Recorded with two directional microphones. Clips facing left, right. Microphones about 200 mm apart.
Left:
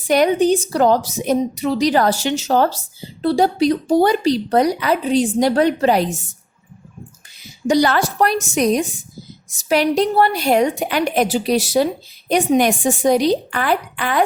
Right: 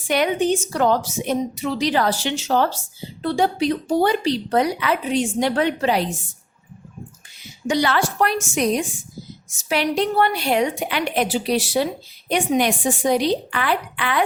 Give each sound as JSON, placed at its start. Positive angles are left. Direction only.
{"t": 0.1, "sound": "a woman's voice", "side_deg": 40}
{"t": 7.7, "sound": "a woman's voice", "side_deg": 40}